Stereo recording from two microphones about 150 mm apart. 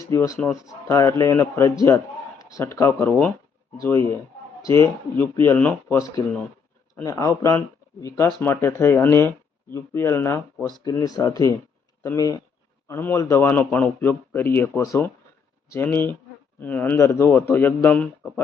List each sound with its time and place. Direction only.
0.0 s a man's voice: 20° left (ahead or behind)